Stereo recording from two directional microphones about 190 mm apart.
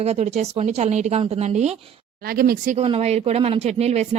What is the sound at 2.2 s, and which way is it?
Speech, 50° right (ahead or behind).